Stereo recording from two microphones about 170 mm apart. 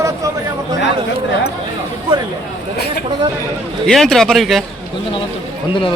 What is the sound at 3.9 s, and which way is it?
Speech, centre (ahead or behind).